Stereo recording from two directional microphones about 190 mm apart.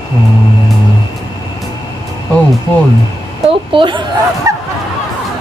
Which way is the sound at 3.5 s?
25° right (ahead or behind).